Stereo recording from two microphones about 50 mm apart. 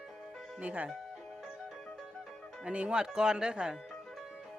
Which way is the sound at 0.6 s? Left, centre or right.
Right.